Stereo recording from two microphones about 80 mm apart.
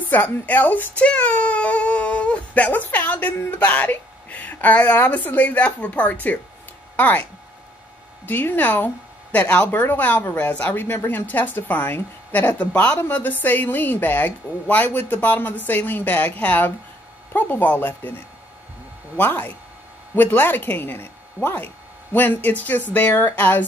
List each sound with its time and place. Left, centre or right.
0.0 s a woman's voice: left
8.3 s a woman's voice: left
19.1 s a woman's voice: left